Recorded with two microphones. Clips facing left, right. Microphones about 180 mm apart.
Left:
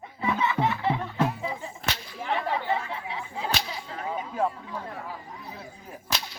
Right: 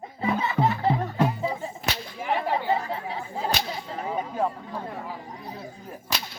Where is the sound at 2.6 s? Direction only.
40° right (ahead or behind).